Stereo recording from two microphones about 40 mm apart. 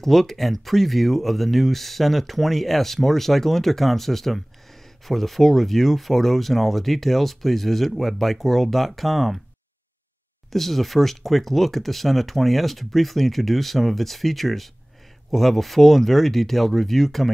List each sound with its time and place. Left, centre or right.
0.0 s speech: centre
10.5 s speech: centre